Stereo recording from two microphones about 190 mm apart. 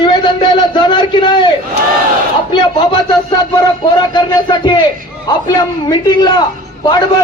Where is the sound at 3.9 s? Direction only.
25° left (ahead or behind).